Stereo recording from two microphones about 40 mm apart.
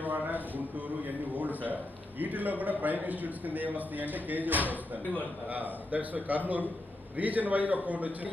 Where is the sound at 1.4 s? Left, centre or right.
Right.